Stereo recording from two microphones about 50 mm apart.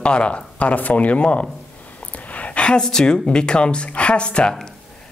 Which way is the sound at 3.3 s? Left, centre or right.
Centre.